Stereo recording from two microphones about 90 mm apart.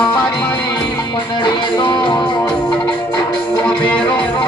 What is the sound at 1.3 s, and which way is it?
Music, 60° left (ahead or behind).